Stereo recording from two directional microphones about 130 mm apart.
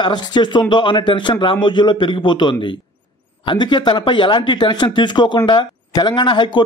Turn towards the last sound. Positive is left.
turn(degrees=40)  # may be behind; listen again after turning